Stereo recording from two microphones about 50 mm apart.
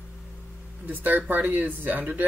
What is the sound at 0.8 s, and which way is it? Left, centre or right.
Speech, right.